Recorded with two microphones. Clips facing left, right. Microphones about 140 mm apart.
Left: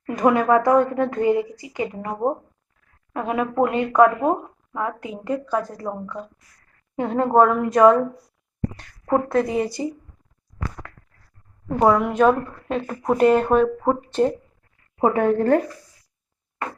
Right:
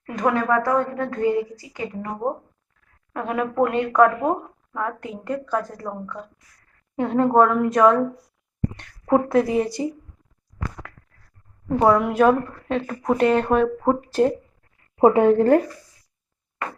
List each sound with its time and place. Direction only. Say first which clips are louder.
0.2 s a woman's voice: left 3 dB; 10° left (ahead or behind)
11.8 s speech: even; centre (ahead or behind)
14.9 s a woman's voice: right 4 dB; 20° right (ahead or behind)